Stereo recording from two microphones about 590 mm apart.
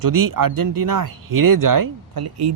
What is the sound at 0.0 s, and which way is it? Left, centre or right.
Speech, right.